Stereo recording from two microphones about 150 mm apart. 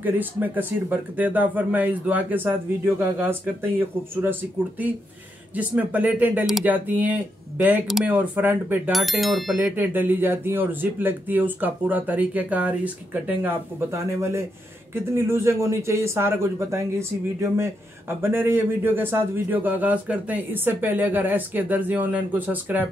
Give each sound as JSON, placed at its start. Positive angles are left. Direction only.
{"t": 0.0, "sound": "a man's voice", "side_deg": -10}
{"t": 8.9, "sound": "speech", "side_deg": 0}
{"t": 9.6, "sound": "a man's voice", "side_deg": -10}